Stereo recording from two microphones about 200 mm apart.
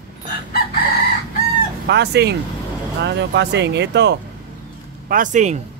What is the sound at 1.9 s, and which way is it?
Speech, 55° right (ahead or behind).